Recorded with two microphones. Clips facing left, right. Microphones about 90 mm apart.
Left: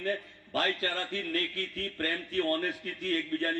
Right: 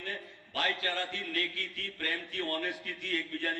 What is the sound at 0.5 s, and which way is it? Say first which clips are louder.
Speech: left 2 dB; 40° left (ahead or behind).